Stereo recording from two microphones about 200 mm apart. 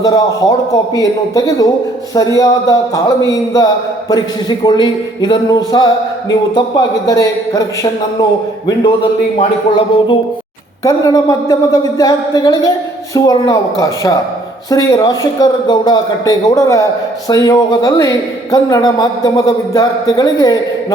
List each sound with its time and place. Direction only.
0.0 s a man's voice: 20° left (ahead or behind)